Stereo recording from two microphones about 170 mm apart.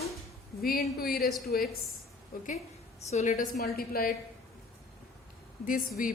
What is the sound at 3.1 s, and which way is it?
A woman's voice, 45° left (ahead or behind).